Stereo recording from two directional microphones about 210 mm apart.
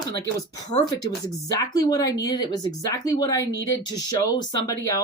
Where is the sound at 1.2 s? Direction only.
15° left (ahead or behind).